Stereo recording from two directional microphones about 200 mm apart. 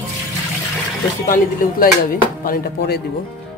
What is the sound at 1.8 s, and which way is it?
Speech, 45° left (ahead or behind).